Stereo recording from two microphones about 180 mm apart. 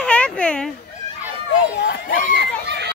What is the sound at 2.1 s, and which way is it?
Speech, 50° left (ahead or behind).